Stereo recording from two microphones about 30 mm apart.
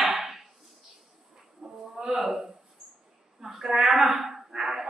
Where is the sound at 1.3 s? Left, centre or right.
Centre.